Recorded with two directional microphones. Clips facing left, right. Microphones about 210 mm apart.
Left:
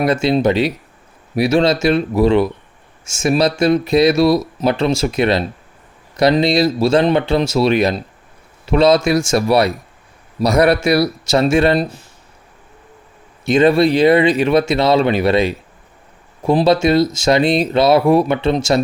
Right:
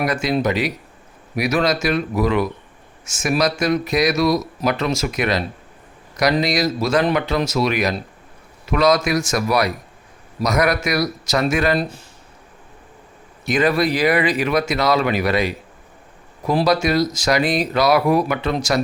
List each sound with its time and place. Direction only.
0.0 s speech: 30° left (ahead or behind)
13.4 s speech: 25° left (ahead or behind)